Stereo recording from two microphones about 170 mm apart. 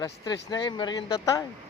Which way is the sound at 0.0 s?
25° left (ahead or behind).